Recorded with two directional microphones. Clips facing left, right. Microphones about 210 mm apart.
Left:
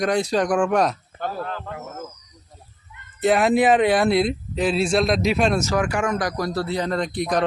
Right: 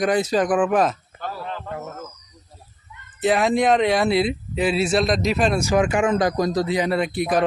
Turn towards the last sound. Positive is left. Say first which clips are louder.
# right 2 dB
turn(degrees=-5)  # may be behind; listen again after turning